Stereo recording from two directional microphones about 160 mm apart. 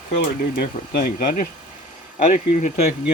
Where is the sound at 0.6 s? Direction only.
60° left (ahead or behind).